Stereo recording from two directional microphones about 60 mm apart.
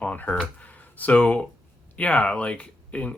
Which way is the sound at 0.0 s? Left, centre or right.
Left.